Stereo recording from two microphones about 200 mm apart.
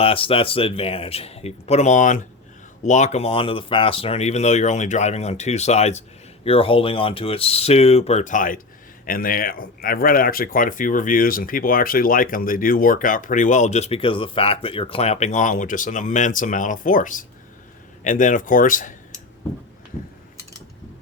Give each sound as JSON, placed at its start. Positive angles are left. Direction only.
{"t": 0.0, "sound": "speech", "side_deg": 25}